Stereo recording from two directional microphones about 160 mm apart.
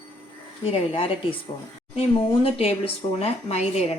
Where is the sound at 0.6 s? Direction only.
35° left (ahead or behind).